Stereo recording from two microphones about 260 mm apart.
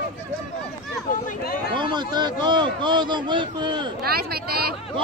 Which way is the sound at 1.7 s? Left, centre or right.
Centre.